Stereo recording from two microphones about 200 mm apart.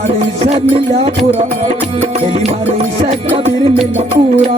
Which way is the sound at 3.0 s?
35° right (ahead or behind).